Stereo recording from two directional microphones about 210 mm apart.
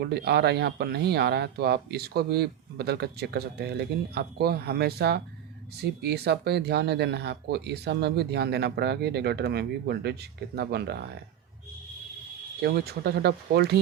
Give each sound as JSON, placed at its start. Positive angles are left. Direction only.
{"t": 0.0, "sound": "speech", "side_deg": -50}
{"t": 12.6, "sound": "speech", "side_deg": -50}